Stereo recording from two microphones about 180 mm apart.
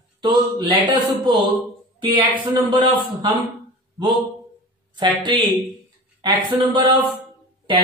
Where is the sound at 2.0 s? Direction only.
25° right (ahead or behind).